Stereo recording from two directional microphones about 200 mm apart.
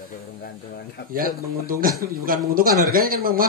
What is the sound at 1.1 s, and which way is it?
Speech, 45° right (ahead or behind).